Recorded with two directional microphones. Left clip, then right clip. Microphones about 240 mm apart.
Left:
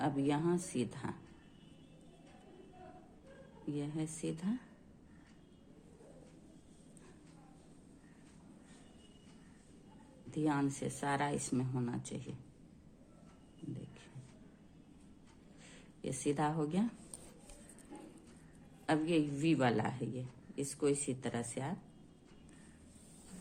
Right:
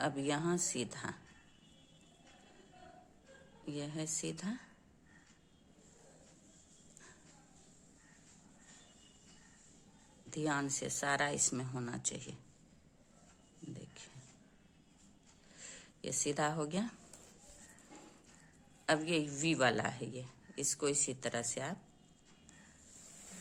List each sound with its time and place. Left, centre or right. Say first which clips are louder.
0.0 s a woman's voice: left 1 dB; right
3.7 s a woman's voice: left 1 dB; right
10.2 s a woman's voice: left 1 dB; right
13.7 s a sound: even; right
15.7 s speech: right 2 dB; right
18.9 s a woman's voice: even; right